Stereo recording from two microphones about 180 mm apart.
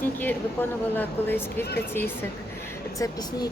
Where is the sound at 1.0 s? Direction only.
10° left (ahead or behind).